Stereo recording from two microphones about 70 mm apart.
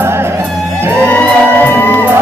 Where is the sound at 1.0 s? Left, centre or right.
Left.